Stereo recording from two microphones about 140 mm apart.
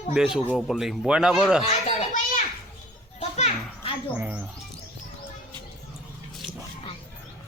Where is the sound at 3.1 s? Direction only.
45° left (ahead or behind).